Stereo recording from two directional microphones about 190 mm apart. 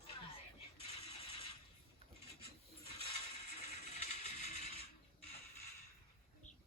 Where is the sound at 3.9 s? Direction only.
35° left (ahead or behind).